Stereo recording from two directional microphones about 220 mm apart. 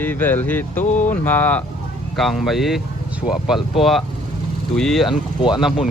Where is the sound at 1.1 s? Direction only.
5° left (ahead or behind).